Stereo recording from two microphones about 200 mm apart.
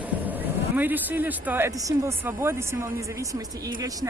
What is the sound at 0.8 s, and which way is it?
Speech, 10° right (ahead or behind).